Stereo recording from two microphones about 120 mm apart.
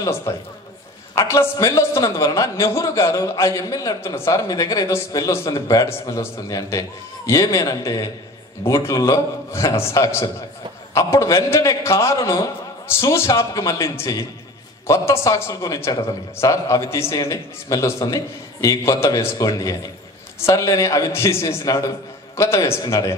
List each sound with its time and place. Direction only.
0.3 s a man's voice: 25° left (ahead or behind)